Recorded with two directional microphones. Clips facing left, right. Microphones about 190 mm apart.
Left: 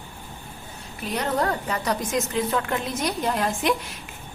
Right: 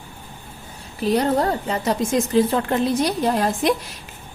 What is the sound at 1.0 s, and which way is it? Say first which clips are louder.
A woman's voice: right 6 dB; 35° right (ahead or behind).